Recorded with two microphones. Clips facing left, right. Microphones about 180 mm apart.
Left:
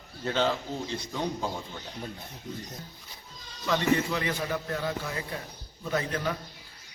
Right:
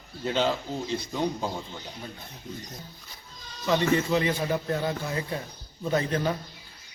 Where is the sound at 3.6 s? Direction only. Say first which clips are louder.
Right 2 dB; 20° right (ahead or behind).